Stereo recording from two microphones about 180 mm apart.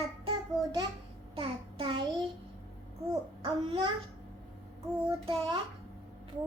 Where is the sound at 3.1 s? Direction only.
25° right (ahead or behind).